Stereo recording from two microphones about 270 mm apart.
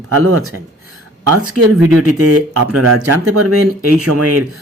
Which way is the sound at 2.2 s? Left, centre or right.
Right.